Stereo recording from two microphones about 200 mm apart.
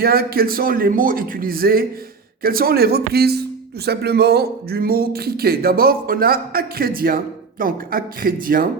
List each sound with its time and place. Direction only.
0.0 s speech: 50° right (ahead or behind)